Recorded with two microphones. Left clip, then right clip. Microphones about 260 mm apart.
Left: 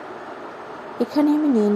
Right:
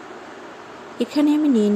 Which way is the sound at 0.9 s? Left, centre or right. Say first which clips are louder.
Even; right.